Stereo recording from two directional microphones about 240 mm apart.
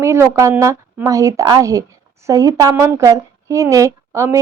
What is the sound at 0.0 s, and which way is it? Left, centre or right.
A woman's voice, centre.